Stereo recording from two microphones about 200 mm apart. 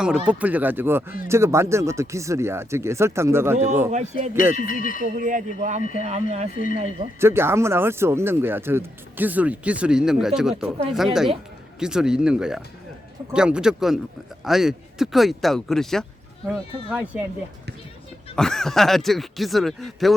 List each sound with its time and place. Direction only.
0.3 s speech: 5° right (ahead or behind)
3.9 s speech: 35° right (ahead or behind)
4.6 s speech: 45° left (ahead or behind)
5.0 s speech: 40° right (ahead or behind)
7.2 s speech: 10° right (ahead or behind)
18.3 s speech: centre (ahead or behind)